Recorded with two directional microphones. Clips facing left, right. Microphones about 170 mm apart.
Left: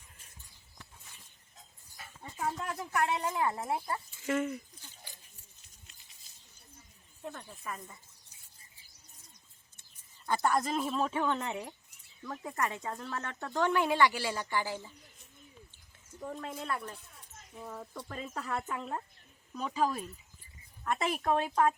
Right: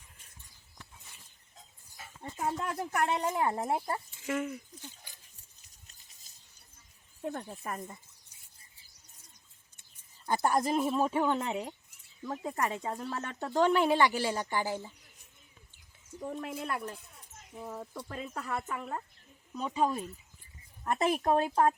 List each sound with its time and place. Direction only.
2.7 s speech: 45° right (ahead or behind)
3.2 s speech: 25° right (ahead or behind)
4.3 s speech: centre (ahead or behind)
6.3 s a sound: 45° right (ahead or behind)
7.3 s speech: 45° right (ahead or behind)
10.2 s a woman's voice: 15° right (ahead or behind)
14.1 s speech: 45° right (ahead or behind)
16.2 s speech: 15° right (ahead or behind); by 20.0 s centre (ahead or behind)
20.8 s speech: 40° right (ahead or behind)